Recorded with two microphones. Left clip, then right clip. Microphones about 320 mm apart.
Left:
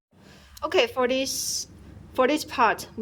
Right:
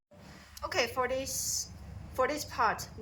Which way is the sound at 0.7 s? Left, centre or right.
Left.